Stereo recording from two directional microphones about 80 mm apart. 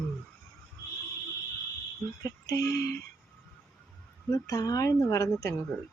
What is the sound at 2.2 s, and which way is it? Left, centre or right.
Speech, left.